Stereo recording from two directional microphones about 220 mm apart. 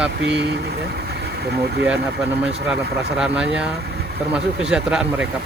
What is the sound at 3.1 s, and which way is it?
Speech, 5° right (ahead or behind).